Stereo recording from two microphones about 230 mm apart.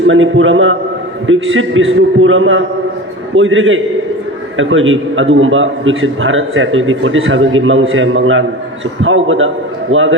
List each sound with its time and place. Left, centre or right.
0.1 s a man's voice: right